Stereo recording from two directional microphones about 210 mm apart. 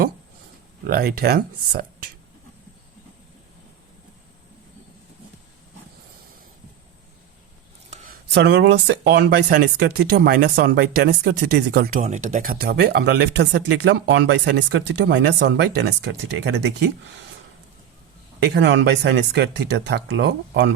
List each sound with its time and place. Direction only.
0.9 s speech: 45° right (ahead or behind)
7.9 s speech: 40° right (ahead or behind)
12.0 s speech: 35° right (ahead or behind); by 16.7 s 55° right (ahead or behind)
18.4 s speech: 55° right (ahead or behind)